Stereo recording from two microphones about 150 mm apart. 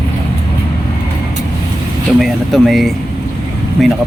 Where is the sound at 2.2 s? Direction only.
Centre (ahead or behind).